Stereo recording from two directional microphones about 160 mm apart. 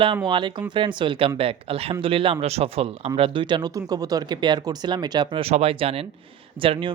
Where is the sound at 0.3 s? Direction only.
30° right (ahead or behind).